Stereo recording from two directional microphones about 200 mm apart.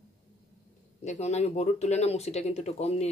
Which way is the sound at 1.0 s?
35° left (ahead or behind).